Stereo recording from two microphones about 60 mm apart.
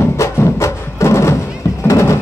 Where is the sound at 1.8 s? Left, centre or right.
Left.